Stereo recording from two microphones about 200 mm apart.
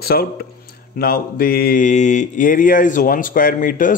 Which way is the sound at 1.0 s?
50° left (ahead or behind).